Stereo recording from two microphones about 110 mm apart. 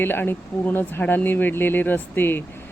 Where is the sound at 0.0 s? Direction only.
20° left (ahead or behind).